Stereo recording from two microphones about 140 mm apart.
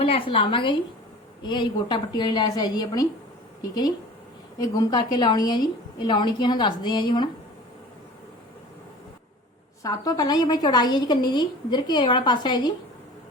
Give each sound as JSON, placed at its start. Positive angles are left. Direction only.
{"t": 0.0, "sound": "a woman's voice", "side_deg": 40}
{"t": 4.6, "sound": "a woman's voice", "side_deg": 30}
{"t": 9.8, "sound": "a woman's voice", "side_deg": 25}